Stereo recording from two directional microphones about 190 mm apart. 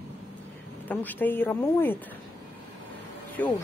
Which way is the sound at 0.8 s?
10° left (ahead or behind).